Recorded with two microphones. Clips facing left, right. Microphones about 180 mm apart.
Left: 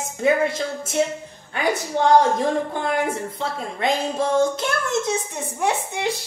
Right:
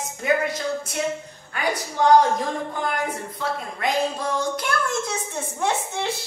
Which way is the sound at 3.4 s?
25° left (ahead or behind).